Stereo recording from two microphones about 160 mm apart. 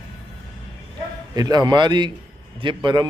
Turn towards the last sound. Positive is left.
turn(degrees=-30)  # may be behind; listen again after turning